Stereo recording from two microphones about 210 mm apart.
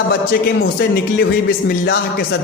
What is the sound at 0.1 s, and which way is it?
A man's voice, 50° left (ahead or behind).